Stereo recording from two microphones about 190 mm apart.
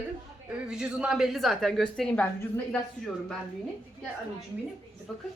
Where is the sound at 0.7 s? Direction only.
5° right (ahead or behind).